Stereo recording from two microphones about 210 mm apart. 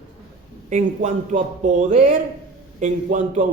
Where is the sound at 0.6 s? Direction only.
35° right (ahead or behind).